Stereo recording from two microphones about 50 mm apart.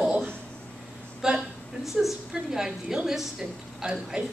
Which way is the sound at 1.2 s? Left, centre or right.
Centre.